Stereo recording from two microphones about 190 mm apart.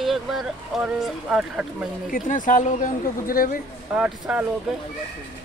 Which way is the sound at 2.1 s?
45° left (ahead or behind).